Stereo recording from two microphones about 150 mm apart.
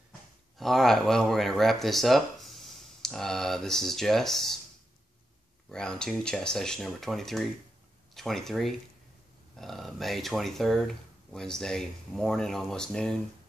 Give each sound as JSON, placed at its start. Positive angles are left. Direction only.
{"t": 0.6, "sound": "speech", "side_deg": 0}
{"t": 5.7, "sound": "speech", "side_deg": 5}